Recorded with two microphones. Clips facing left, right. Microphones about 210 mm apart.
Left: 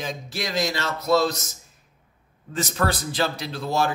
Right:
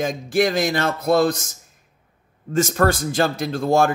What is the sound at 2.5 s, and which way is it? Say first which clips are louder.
Speech: right 7 dB; 45° right (ahead or behind).